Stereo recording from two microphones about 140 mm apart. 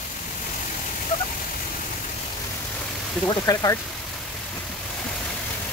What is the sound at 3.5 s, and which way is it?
Speech, 25° left (ahead or behind).